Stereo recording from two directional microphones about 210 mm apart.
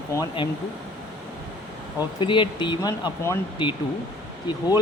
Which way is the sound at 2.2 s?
20° left (ahead or behind).